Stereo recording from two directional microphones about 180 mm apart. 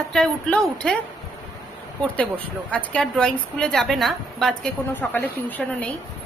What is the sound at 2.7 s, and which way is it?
A woman's voice, 5° left (ahead or behind).